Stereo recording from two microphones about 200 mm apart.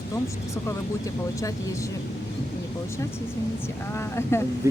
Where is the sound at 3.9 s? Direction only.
15° left (ahead or behind).